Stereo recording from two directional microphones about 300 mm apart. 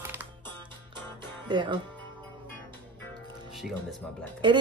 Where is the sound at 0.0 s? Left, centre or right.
Centre.